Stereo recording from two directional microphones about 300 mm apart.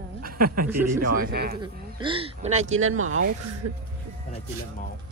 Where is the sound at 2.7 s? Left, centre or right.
Right.